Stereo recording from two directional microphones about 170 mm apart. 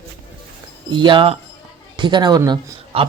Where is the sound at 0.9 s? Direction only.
30° right (ahead or behind).